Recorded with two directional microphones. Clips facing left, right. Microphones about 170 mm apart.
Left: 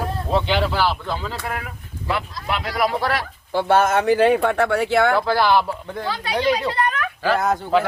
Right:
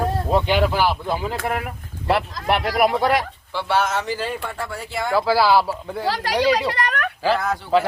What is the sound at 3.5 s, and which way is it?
Speech, 50° left (ahead or behind).